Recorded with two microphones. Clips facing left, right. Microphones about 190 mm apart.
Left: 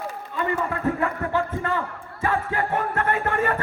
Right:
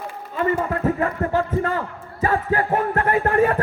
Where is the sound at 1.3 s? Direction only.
40° right (ahead or behind).